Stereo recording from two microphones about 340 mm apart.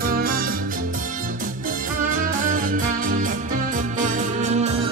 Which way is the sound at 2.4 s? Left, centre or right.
Right.